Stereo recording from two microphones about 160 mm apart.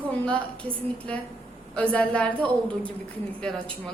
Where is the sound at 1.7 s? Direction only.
5° left (ahead or behind).